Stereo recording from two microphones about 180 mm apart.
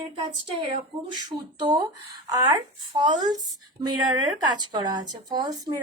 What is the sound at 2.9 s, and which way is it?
Speech, 25° right (ahead or behind).